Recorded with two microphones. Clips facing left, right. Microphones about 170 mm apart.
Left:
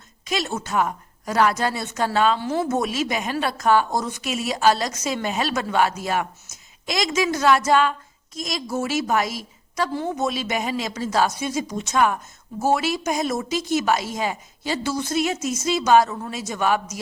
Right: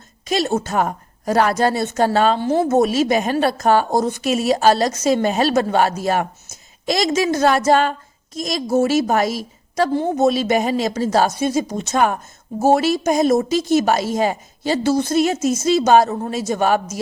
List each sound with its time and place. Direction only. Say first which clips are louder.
0.3 s a woman's voice: right 7 dB; 40° right (ahead or behind)
10.1 s a woman's voice: right 8 dB; 35° right (ahead or behind)
11.7 s a woman's voice: right 3 dB; 45° right (ahead or behind)